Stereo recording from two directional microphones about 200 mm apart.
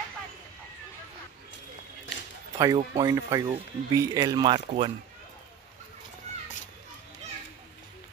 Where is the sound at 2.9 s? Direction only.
15° right (ahead or behind).